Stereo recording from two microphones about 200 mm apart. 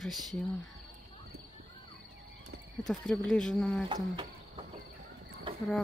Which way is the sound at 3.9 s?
25° right (ahead or behind).